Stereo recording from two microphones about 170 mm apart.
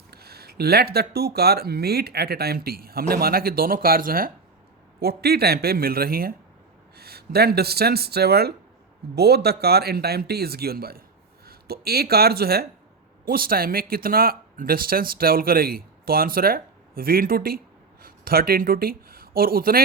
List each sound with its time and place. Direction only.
0.1 s speech: 65° right (ahead or behind)